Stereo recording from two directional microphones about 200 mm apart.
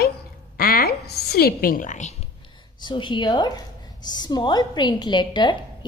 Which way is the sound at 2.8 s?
25° left (ahead or behind).